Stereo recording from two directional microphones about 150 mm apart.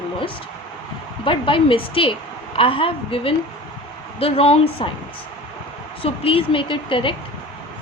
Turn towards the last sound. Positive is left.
turn(degrees=35)  # may be behind; listen again after turning